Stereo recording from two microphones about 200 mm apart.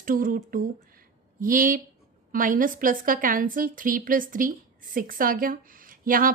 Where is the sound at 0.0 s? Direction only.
45° right (ahead or behind).